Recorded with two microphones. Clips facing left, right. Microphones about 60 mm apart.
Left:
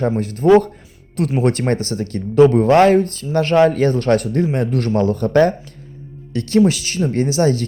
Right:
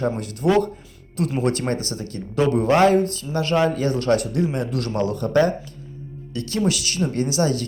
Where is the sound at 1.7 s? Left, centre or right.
Left.